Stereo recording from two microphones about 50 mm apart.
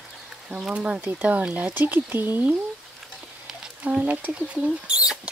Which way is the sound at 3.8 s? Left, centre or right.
Right.